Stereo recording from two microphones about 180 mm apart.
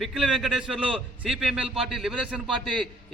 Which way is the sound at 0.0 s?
Centre (ahead or behind).